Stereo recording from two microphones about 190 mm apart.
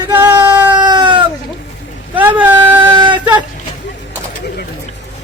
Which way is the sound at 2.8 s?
25° right (ahead or behind).